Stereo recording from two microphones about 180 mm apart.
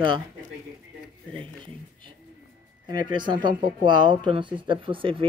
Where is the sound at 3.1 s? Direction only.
25° right (ahead or behind).